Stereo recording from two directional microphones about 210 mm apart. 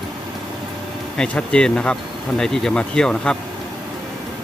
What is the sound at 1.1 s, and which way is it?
Speech, 5° left (ahead or behind).